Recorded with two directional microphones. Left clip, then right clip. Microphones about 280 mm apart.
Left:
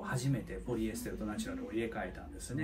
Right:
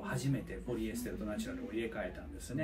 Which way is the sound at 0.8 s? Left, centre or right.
Centre.